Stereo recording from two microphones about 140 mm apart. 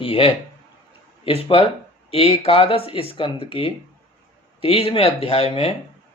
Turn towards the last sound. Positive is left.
turn(degrees=45)  # may be behind; listen again after turning